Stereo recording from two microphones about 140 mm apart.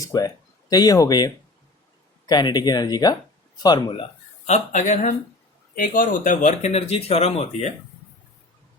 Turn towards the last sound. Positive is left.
turn(degrees=50)  # may be behind; listen again after turning